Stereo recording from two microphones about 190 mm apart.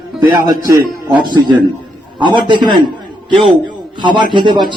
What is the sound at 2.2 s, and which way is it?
Speech, 25° right (ahead or behind).